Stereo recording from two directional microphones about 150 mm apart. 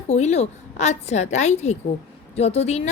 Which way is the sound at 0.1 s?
50° left (ahead or behind).